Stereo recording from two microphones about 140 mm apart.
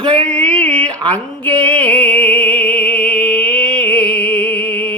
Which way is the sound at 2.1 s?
5° left (ahead or behind).